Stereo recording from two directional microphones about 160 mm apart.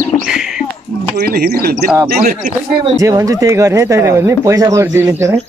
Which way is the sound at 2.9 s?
20° right (ahead or behind).